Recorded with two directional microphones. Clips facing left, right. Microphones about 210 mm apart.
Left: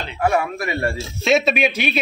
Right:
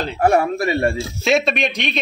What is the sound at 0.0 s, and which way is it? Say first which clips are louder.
Speech: right 4 dB; 40° right (ahead or behind).